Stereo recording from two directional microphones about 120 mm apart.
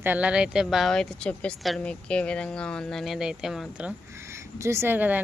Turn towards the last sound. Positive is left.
turn(degrees=-15)  # may be behind; listen again after turning